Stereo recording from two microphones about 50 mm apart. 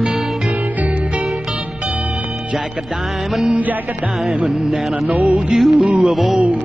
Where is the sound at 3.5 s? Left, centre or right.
Right.